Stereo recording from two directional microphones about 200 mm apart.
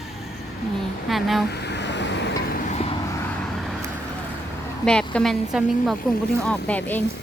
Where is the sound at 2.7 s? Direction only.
30° left (ahead or behind).